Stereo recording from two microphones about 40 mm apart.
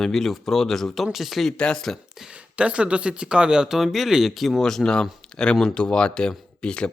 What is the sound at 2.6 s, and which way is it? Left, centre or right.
Speech, right.